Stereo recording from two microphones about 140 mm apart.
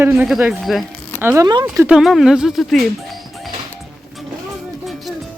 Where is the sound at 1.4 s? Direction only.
30° right (ahead or behind).